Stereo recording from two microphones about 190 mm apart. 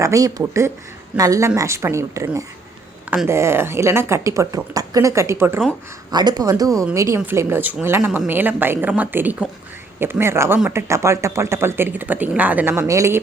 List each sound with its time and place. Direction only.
0.0 s speech: 15° right (ahead or behind)